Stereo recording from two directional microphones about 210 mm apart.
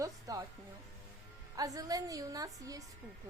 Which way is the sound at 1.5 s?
15° right (ahead or behind).